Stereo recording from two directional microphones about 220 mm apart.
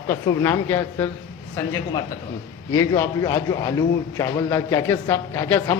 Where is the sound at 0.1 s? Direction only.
10° left (ahead or behind).